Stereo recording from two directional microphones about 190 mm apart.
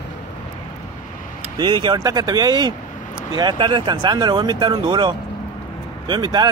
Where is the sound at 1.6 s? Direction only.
25° right (ahead or behind).